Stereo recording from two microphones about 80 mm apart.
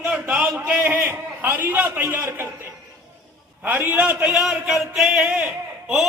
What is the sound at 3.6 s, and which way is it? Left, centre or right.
Speech, right.